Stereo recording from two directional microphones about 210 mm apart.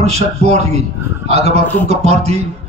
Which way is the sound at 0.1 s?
30° right (ahead or behind).